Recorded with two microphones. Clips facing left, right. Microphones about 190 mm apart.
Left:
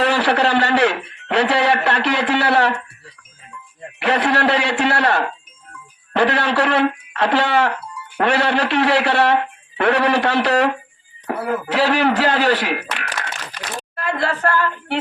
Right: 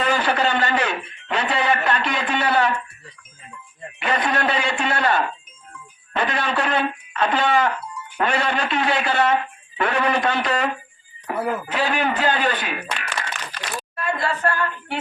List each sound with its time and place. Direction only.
0.0 s a man's voice: 70° left (ahead or behind)
4.0 s speech: 70° left (ahead or behind)
14.0 s a capella: 75° left (ahead or behind)